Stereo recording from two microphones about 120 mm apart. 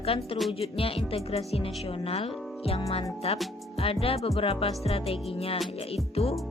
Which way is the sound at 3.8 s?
55° left (ahead or behind).